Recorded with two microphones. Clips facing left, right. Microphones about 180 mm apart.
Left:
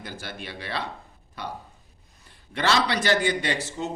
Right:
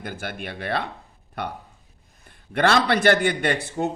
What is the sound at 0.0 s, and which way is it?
A man's voice, 55° right (ahead or behind).